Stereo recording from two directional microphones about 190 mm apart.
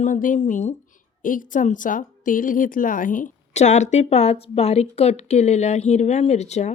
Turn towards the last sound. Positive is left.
turn(degrees=35)  # may be behind; listen again after turning